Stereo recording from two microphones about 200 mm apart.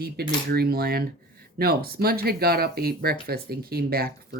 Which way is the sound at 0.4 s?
50° right (ahead or behind).